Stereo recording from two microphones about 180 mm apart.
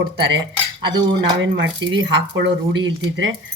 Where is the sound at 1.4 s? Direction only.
90° right.